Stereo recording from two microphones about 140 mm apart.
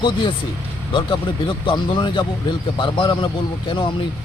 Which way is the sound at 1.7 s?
35° left (ahead or behind).